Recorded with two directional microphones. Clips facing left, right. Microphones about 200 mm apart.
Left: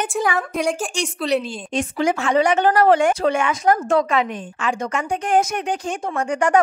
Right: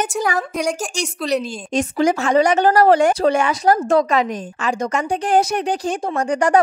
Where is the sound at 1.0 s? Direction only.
40° right (ahead or behind).